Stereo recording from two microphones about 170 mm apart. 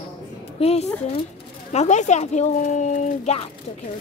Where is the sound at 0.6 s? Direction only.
35° left (ahead or behind).